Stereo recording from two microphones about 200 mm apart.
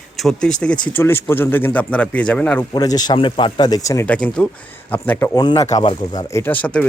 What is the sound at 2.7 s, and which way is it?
Speech, 20° left (ahead or behind).